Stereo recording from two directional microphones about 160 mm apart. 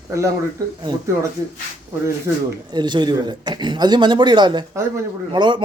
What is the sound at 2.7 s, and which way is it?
Speech, 25° right (ahead or behind).